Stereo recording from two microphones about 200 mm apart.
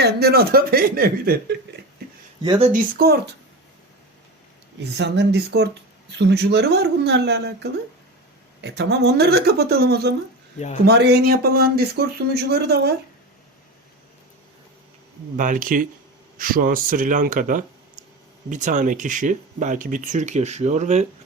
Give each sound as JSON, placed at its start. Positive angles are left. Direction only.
{"t": 0.0, "sound": "speech", "side_deg": -50}
{"t": 3.0, "sound": "speech", "side_deg": -50}
{"t": 4.8, "sound": "a woman's voice", "side_deg": -60}
{"t": 15.4, "sound": "speech", "side_deg": -40}